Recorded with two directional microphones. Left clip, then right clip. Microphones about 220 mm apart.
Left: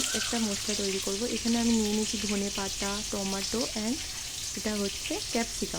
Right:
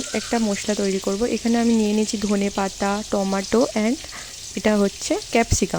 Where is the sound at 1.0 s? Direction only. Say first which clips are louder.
Right 9 dB; 40° right (ahead or behind).